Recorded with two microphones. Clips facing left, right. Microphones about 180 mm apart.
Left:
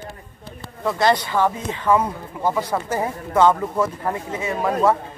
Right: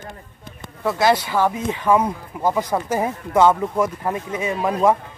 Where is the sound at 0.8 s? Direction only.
5° right (ahead or behind).